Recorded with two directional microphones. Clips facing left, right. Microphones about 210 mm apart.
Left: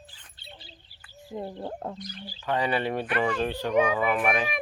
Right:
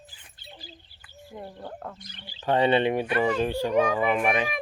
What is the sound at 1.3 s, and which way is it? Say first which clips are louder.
Speech: left 5 dB; 20° left (ahead or behind).